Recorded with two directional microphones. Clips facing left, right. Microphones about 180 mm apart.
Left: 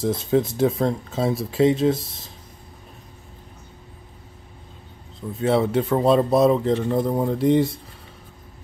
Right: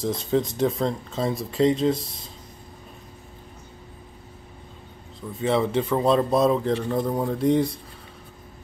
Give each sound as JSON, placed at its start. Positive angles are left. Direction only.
{"t": 0.2, "sound": "speech", "side_deg": 5}
{"t": 5.4, "sound": "speech", "side_deg": 5}